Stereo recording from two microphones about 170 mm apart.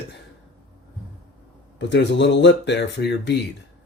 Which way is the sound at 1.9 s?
90° left.